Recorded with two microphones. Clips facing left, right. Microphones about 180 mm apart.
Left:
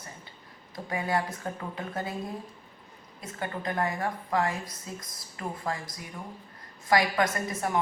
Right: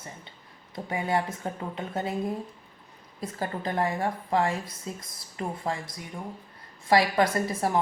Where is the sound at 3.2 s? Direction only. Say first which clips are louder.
Right 3 dB; 35° right (ahead or behind).